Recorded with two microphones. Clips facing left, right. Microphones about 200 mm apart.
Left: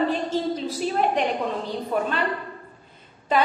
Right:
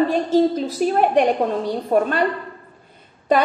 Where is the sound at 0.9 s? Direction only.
55° right (ahead or behind).